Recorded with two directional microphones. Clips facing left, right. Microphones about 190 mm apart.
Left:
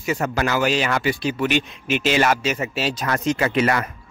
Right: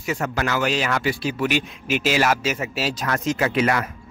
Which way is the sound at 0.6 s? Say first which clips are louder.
Left 2 dB; centre (ahead or behind).